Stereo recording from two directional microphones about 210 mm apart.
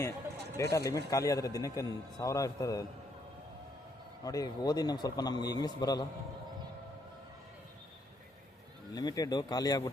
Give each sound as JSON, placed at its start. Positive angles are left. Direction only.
{"t": 0.5, "sound": "a man's voice", "side_deg": 15}
{"t": 4.2, "sound": "a man's voice", "side_deg": 15}
{"t": 9.0, "sound": "a man's voice", "side_deg": 20}